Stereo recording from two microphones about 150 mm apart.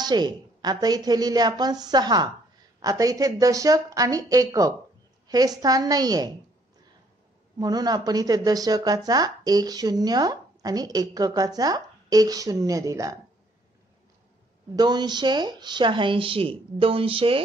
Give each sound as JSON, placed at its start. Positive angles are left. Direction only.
{"t": 0.0, "sound": "speech", "side_deg": -30}
{"t": 7.5, "sound": "speech", "side_deg": -25}
{"t": 14.8, "sound": "speech", "side_deg": -30}